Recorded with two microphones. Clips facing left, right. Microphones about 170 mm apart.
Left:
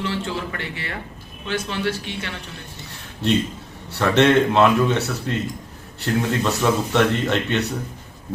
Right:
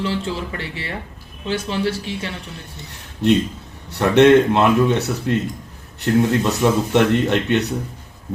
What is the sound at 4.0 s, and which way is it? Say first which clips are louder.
A man's voice: right 4 dB; 15° right (ahead or behind).